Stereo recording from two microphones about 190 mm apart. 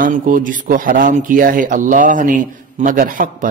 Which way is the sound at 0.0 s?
45° right (ahead or behind).